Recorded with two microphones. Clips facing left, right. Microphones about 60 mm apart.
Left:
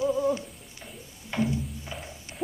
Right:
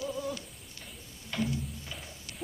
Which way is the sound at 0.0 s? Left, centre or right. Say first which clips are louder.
Left 10 dB; left.